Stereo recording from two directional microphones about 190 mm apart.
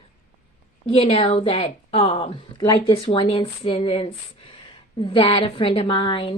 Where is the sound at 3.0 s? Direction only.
30° left (ahead or behind).